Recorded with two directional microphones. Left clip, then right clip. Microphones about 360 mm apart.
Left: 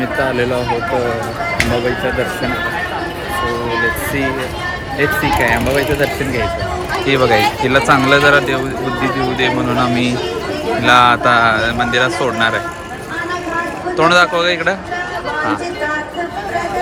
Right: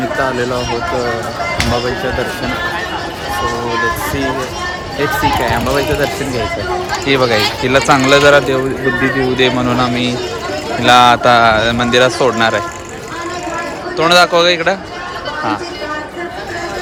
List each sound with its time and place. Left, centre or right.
7.1 s a man's voice: centre
13.9 s speech: centre